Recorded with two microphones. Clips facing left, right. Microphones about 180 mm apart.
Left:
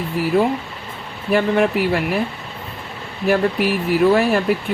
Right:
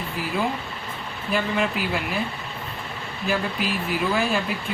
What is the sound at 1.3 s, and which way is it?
Speech, 65° left (ahead or behind).